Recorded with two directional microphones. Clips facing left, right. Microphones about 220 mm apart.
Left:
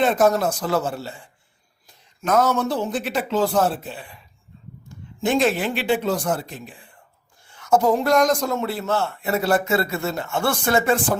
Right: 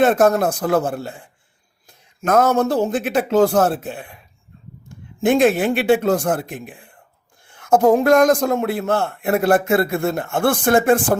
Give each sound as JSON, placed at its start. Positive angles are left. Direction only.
{"t": 0.0, "sound": "a man's voice", "side_deg": -55}